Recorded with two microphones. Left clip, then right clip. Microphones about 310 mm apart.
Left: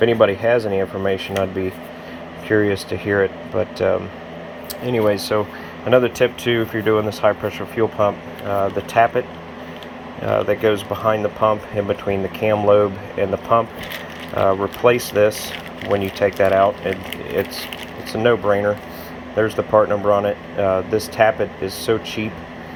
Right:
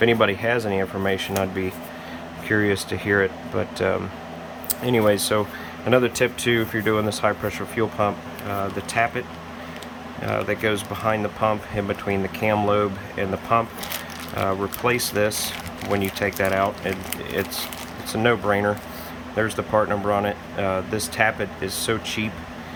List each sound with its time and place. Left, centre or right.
0.0 s speech: centre
2.5 s speech: centre
10.2 s speech: centre
14.3 s speech: centre